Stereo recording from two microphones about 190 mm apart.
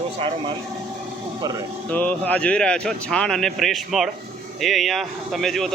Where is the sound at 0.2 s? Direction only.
25° right (ahead or behind).